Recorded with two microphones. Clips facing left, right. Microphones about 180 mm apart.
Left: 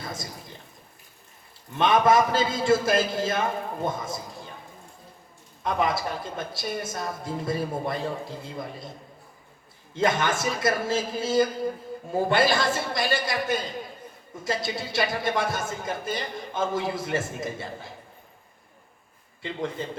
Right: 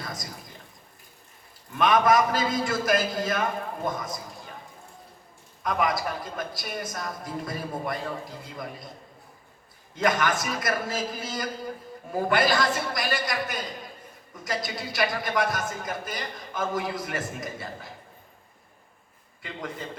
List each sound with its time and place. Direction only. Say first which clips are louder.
1.7 s a man's voice: left 1 dB; 25° left (ahead or behind)
5.6 s a man's voice: left 1 dB; 25° left (ahead or behind)
9.9 s a man's voice: left 1 dB; 25° left (ahead or behind)
19.4 s a man's voice: left 5 dB; 25° left (ahead or behind)